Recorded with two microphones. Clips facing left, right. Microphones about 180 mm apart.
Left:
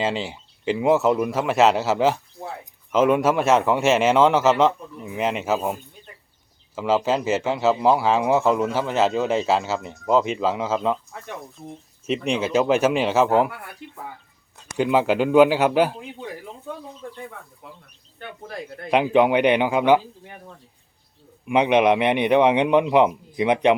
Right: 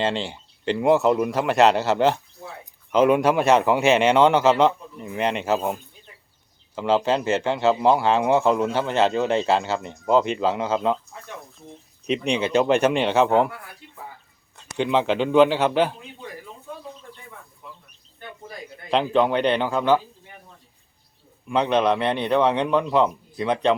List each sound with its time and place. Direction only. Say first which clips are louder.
0.0 s speech: even; 5° left (ahead or behind)
11.1 s speech: left 3 dB; 65° left (ahead or behind)
12.0 s speech: even; centre (ahead or behind)
14.8 s a man's voice: left 2 dB; 5° left (ahead or behind)
18.2 s speech: left 4 dB; 65° left (ahead or behind)
18.9 s a man's voice: left 3 dB; 15° left (ahead or behind)
21.4 s a man's voice: left 3 dB; 15° left (ahead or behind)